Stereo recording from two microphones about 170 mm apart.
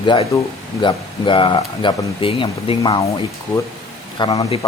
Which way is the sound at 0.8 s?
30° left (ahead or behind).